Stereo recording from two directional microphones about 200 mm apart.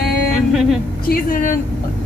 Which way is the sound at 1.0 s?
45° left (ahead or behind).